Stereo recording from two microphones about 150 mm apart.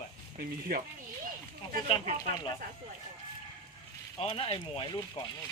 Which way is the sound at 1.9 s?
35° left (ahead or behind).